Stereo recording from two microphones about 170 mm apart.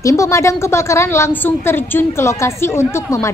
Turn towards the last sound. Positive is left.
turn(degrees=15)  # may be behind; listen again after turning